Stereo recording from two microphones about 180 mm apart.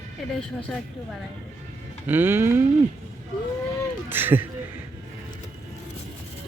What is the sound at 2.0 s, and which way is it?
Cattle, 10° right (ahead or behind).